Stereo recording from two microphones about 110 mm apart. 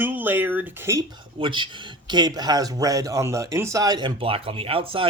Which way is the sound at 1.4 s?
45° right (ahead or behind).